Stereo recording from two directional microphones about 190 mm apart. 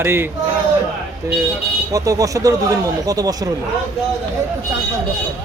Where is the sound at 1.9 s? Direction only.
15° right (ahead or behind).